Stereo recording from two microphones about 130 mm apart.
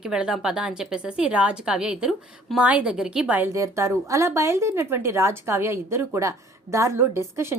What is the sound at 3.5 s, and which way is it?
Speech, 25° right (ahead or behind).